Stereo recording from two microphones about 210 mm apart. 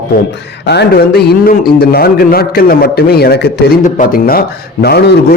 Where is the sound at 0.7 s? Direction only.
50° left (ahead or behind).